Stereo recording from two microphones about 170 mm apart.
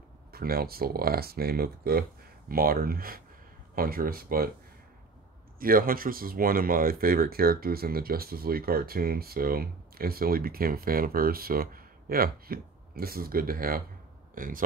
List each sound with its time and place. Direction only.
0.3 s speech: 60° right (ahead or behind)
5.6 s speech: 55° right (ahead or behind)